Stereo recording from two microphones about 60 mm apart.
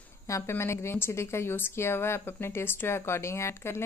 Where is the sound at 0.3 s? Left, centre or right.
Left.